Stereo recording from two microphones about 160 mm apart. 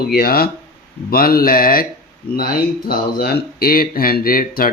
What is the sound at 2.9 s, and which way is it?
Speech, 70° left (ahead or behind).